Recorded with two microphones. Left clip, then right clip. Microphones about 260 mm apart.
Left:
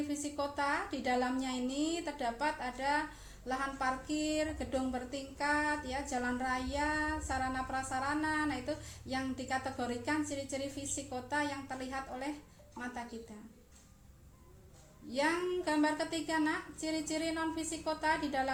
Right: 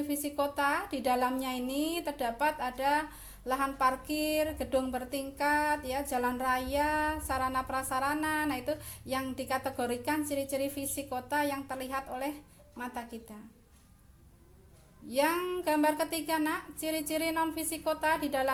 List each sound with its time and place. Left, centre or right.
0.1 s a woman's voice: right
15.1 s a woman's voice: right